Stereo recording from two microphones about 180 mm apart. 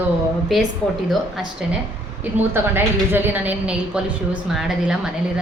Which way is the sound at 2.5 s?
10° right (ahead or behind).